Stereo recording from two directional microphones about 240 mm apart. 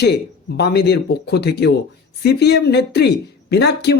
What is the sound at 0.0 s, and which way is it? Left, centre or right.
Speech, left.